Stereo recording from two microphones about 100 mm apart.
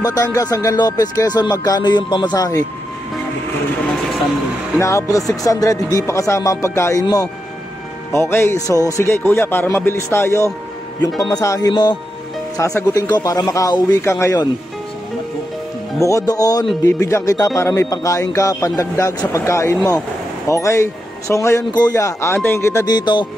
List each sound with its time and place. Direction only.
0.0 s speech: 35° left (ahead or behind)
4.7 s speech: 30° left (ahead or behind)
8.1 s speech: 25° left (ahead or behind)
11.7 s speech: 50° left (ahead or behind)
12.5 s speech: 35° left (ahead or behind)
16.0 s speech: 35° left (ahead or behind)
21.7 s speech: 40° left (ahead or behind)
22.8 s speech: 45° left (ahead or behind)